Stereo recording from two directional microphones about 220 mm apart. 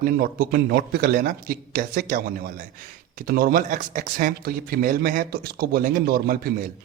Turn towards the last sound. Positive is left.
turn(degrees=-40)  # may be behind; listen again after turning